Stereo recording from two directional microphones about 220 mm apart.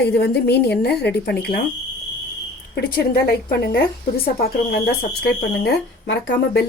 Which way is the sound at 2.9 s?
45° left (ahead or behind).